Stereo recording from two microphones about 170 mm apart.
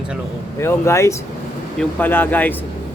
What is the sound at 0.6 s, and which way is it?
Speech, 15° left (ahead or behind).